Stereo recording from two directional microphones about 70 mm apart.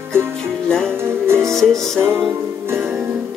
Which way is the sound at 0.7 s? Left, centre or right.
Centre.